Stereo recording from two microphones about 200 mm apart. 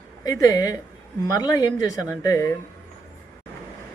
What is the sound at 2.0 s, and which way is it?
Speech, 15° left (ahead or behind).